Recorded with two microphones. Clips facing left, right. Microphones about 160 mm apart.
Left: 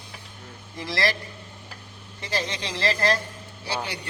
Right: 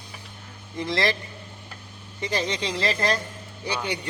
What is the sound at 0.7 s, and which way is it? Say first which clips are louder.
Speech: right 2 dB; 20° right (ahead or behind).